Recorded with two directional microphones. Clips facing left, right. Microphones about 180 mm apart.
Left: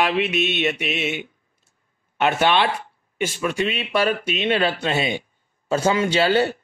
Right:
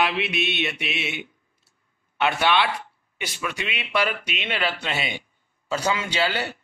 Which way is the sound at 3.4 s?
35° left (ahead or behind).